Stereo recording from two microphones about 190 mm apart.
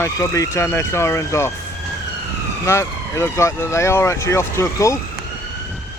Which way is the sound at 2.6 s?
15° left (ahead or behind).